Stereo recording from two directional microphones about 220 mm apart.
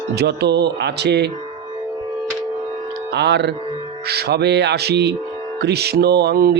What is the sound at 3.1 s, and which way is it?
Speech, 50° right (ahead or behind).